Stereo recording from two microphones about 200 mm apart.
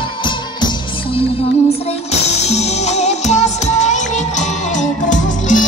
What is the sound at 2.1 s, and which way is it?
Music, 35° left (ahead or behind).